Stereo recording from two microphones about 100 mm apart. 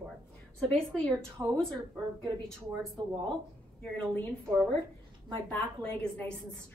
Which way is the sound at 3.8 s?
10° left (ahead or behind).